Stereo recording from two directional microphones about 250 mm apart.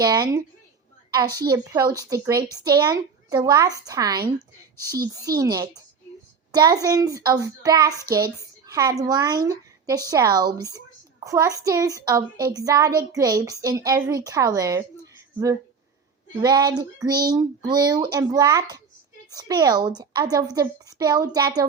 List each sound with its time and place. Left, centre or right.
0.0 s a woman's voice: centre
16.4 s a woman's voice: centre